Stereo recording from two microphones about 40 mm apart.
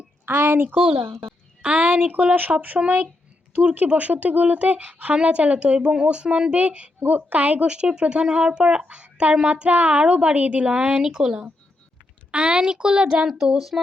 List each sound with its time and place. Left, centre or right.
0.3 s a woman's voice: right
1.6 s speech: right
1.9 s speech: right
7.0 s speech: right
7.7 s speech: right
9.5 s speech: right
11.0 s speech: centre
13.2 s speech: centre